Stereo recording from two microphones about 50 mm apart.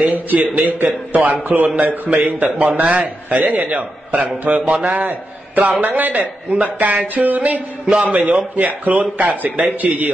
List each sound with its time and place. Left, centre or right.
0.7 s a man's voice: right
4.6 s a man's voice: centre
5.6 s speech: right
7.8 s a man's voice: centre
8.1 s speech: right